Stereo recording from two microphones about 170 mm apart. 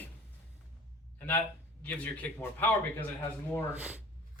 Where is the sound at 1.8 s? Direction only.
10° left (ahead or behind).